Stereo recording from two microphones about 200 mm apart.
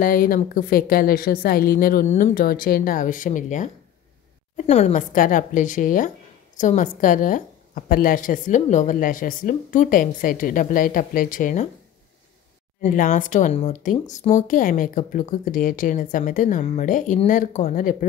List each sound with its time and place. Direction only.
0.0 s a woman's voice: 45° left (ahead or behind)
12.9 s speech: 40° left (ahead or behind)